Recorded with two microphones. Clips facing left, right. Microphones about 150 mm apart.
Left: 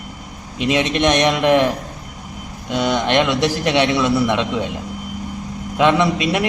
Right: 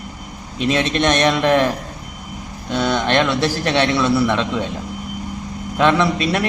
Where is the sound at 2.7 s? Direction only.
15° left (ahead or behind).